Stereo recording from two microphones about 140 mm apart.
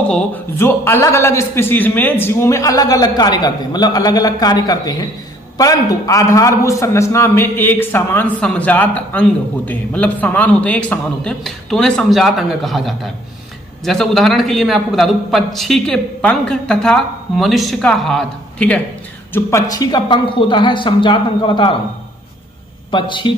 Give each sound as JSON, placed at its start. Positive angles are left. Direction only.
{"t": 0.1, "sound": "a man's voice", "side_deg": 15}
{"t": 19.3, "sound": "speech", "side_deg": 25}
{"t": 22.8, "sound": "speech", "side_deg": 35}